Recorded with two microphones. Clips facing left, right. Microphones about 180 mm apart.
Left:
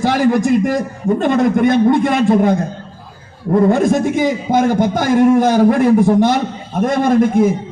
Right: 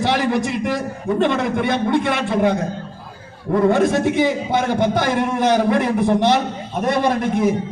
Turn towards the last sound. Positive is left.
turn(degrees=45)  # may be behind; listen again after turning